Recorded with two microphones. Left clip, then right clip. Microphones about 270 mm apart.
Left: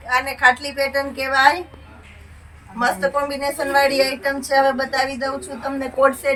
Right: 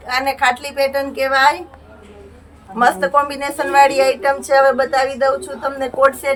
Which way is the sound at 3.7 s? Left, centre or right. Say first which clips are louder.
Right 6 dB; right.